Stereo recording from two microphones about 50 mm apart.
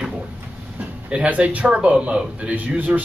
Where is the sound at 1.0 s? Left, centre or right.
Right.